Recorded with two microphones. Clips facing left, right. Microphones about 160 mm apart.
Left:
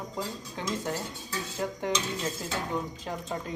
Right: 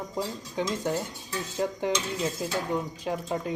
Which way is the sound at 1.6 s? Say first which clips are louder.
Right 4 dB; 20° right (ahead or behind).